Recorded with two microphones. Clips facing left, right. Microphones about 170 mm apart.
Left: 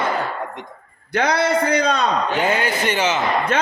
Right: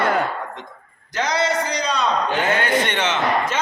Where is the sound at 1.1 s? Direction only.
60° left (ahead or behind).